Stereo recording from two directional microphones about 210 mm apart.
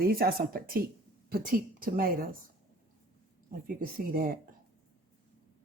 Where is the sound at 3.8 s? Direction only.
45° right (ahead or behind).